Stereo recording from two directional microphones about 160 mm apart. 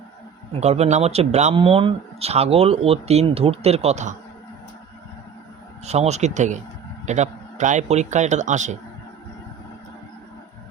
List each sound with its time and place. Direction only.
0.6 s speech: 45° right (ahead or behind)
5.8 s a man's voice: 45° right (ahead or behind)